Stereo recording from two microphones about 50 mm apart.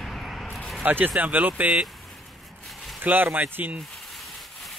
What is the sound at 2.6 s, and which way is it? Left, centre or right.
Zipper, centre.